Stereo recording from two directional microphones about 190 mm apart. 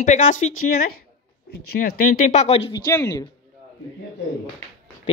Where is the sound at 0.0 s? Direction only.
40° left (ahead or behind).